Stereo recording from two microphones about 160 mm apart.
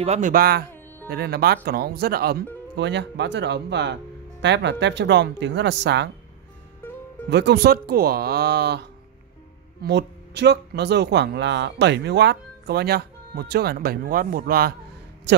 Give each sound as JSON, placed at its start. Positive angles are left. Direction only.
{"t": 0.0, "sound": "speech", "side_deg": -45}
{"t": 0.3, "sound": "speech", "side_deg": -70}
{"t": 1.0, "sound": "speech", "side_deg": -85}
{"t": 2.8, "sound": "speech", "side_deg": -90}
{"t": 7.2, "sound": "speech", "side_deg": -90}
{"t": 9.8, "sound": "speech", "side_deg": -90}
{"t": 15.3, "sound": "speech", "side_deg": -90}